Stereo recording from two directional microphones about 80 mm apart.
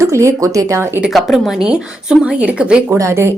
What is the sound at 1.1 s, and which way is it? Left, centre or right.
Speech, centre.